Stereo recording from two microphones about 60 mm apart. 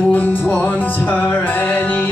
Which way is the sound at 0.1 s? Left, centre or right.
Left.